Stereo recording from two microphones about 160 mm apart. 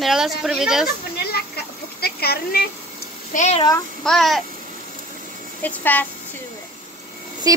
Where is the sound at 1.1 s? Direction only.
80° left.